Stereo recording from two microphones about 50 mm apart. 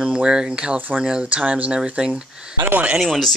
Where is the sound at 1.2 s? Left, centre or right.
Right.